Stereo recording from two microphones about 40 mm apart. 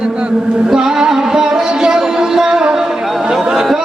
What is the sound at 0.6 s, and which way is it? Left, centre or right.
Music, centre.